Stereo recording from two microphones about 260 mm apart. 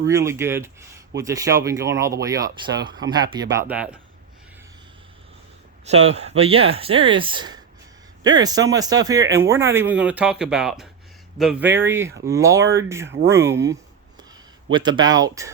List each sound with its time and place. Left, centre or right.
0.0 s speech: centre
5.8 s speech: right